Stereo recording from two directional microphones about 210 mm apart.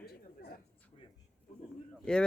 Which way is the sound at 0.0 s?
50° left (ahead or behind).